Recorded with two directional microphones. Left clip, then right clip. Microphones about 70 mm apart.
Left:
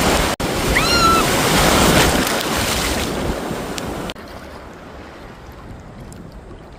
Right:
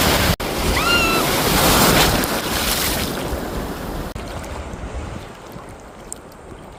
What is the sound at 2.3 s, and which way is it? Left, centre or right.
Boat, right.